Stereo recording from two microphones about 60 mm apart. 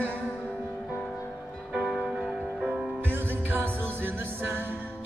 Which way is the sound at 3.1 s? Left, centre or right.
Right.